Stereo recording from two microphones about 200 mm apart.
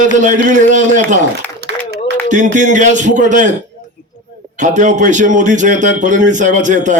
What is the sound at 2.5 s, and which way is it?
Speech, 40° right (ahead or behind).